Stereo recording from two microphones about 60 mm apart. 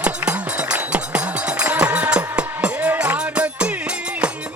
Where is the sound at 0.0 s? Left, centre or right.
Right.